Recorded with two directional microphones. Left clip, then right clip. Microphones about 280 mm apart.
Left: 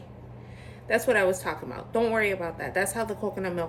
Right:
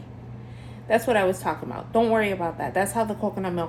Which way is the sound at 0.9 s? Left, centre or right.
Centre.